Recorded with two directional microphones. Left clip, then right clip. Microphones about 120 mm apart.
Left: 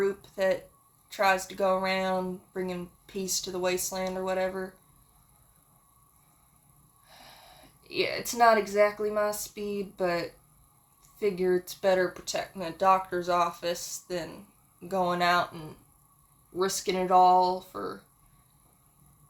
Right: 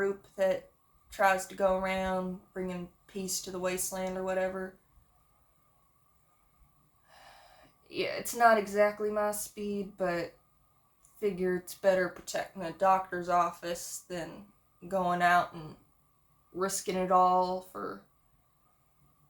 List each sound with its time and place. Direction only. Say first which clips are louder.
0.0 s speech: left 2 dB; 45° left (ahead or behind)
7.9 s speech: left 4 dB; 50° left (ahead or behind)
16.6 s speech: left 4 dB; 50° left (ahead or behind)